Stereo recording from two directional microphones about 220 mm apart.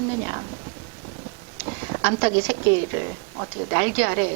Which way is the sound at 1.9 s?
20° right (ahead or behind).